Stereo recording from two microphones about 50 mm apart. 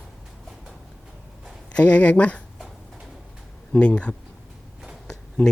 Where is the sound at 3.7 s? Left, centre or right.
Left.